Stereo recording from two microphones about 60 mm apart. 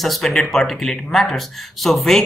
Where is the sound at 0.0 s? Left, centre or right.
Centre.